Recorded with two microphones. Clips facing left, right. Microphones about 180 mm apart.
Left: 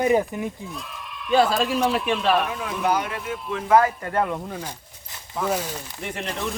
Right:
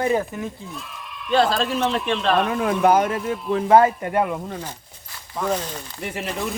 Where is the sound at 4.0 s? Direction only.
20° right (ahead or behind).